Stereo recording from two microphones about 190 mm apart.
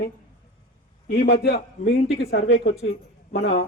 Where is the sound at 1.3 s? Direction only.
55° left (ahead or behind).